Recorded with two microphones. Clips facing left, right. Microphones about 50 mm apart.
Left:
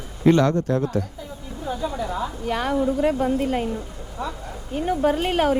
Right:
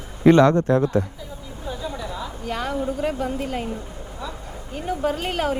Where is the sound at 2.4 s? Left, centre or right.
Left.